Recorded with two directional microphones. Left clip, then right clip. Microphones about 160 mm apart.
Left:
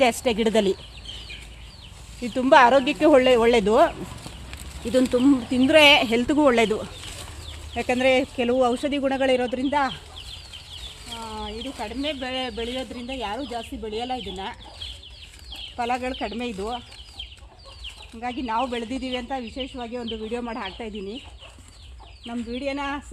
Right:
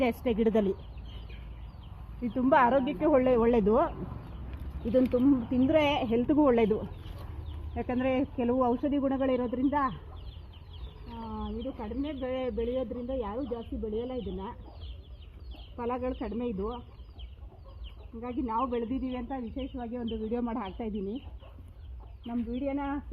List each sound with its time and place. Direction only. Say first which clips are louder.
0.0 s speech: left 9 dB; 40° left (ahead or behind)
0.3 s speech: left 6 dB; 55° left (ahead or behind)
2.3 s speech: left 9 dB; 45° left (ahead or behind)
6.4 s speech: left 6 dB; 30° left (ahead or behind)
7.8 s speech: left 10 dB; 40° left (ahead or behind); by 9.9 s 25° left (ahead or behind)
11.3 s chicken: left 3 dB; 45° left (ahead or behind)
12.0 s speech: left 5 dB; 20° left (ahead or behind)
13.9 s speech: left 7 dB; 30° left (ahead or behind)
15.7 s speech: left 7 dB; 25° left (ahead or behind)
18.2 s speech: left 6 dB; 30° left (ahead or behind)
18.7 s speech: left 4 dB; 20° left (ahead or behind); by 20.1 s 10° right (ahead or behind)
20.3 s speech: left 3 dB; 45° right (ahead or behind)
22.3 s speech: left 4 dB; centre (ahead or behind)